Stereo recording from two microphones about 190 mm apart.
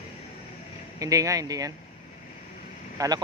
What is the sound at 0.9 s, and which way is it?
Speech, 15° right (ahead or behind).